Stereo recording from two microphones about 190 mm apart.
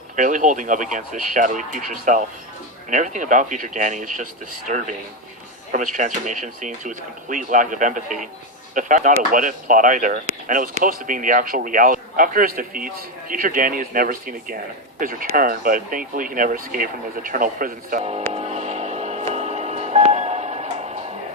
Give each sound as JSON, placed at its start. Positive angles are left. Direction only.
{"t": 0.2, "sound": "speech", "side_deg": -40}
{"t": 18.3, "sound": "music", "side_deg": -35}